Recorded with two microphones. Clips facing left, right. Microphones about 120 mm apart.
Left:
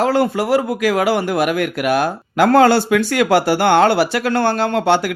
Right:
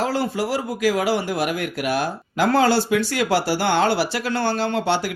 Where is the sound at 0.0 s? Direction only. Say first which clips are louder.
Left 6 dB; 60° left (ahead or behind).